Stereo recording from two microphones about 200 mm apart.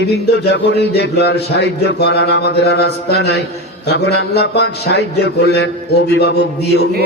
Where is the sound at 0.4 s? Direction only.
55° left (ahead or behind).